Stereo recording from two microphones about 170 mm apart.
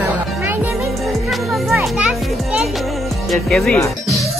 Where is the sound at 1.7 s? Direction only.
5° right (ahead or behind).